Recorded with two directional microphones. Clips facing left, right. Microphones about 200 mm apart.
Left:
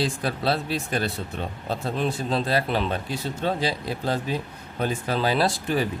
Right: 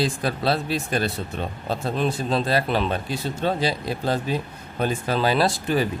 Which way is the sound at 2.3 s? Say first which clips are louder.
Right 2 dB; 80° right.